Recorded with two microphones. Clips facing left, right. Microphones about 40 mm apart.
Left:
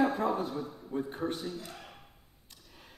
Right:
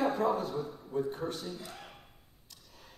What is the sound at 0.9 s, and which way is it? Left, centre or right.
Speech, left.